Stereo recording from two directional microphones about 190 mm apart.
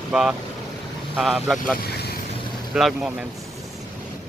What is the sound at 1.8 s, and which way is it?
Vehicle, 55° left (ahead or behind).